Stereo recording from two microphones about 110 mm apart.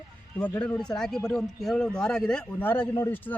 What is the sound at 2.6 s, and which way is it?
Speech, 15° left (ahead or behind).